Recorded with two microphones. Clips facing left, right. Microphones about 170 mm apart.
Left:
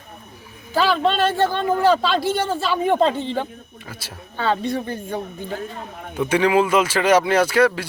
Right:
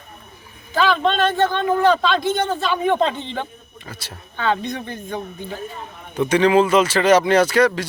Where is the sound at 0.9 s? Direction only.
5° left (ahead or behind).